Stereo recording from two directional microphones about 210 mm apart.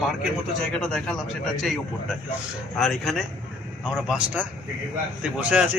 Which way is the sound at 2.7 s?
Centre (ahead or behind).